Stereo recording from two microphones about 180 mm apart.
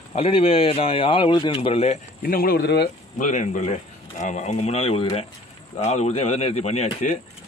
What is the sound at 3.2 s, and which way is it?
A man's voice, 45° left (ahead or behind).